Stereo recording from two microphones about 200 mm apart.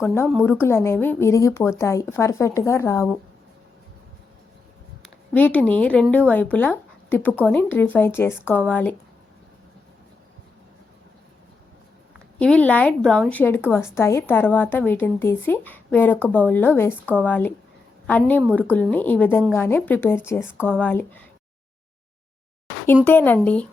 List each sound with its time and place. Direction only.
0.0 s a woman's voice: 10° left (ahead or behind)
5.0 s a woman's voice: 10° left (ahead or behind)
12.4 s a woman's voice: 5° left (ahead or behind)
23.0 s a woman's voice: 10° left (ahead or behind)